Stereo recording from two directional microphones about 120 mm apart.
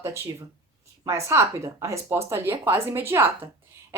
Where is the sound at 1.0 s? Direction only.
25° right (ahead or behind).